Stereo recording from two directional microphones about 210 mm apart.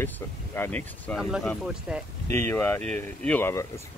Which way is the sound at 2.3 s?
10° left (ahead or behind).